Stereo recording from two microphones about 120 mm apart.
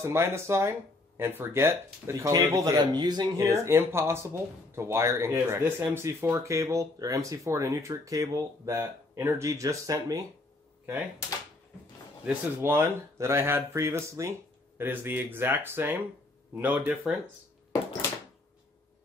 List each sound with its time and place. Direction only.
0.0 s speech: 20° right (ahead or behind)
2.6 s speech: 35° right (ahead or behind)
12.3 s speech: 20° right (ahead or behind)